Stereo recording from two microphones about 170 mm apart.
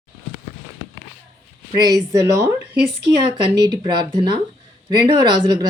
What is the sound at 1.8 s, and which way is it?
Speech, 25° right (ahead or behind).